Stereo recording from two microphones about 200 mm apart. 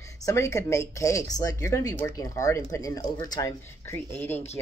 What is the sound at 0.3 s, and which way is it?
Speech, 15° left (ahead or behind).